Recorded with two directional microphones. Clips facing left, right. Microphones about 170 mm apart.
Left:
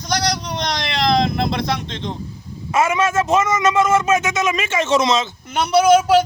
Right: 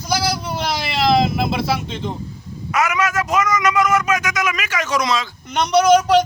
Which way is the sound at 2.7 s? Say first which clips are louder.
Left 2 dB; 25° left (ahead or behind).